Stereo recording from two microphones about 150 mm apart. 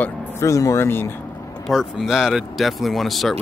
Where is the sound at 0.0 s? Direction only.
20° left (ahead or behind).